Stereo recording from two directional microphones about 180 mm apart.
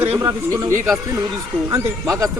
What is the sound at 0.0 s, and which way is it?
Speech, 30° right (ahead or behind).